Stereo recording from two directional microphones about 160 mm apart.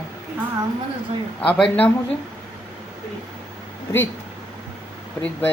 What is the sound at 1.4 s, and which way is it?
Speech, 5° left (ahead or behind).